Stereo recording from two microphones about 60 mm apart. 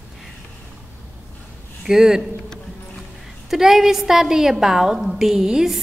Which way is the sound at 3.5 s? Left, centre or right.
Centre.